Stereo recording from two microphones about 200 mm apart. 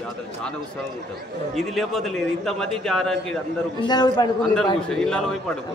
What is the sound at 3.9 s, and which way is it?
Speech, 20° left (ahead or behind).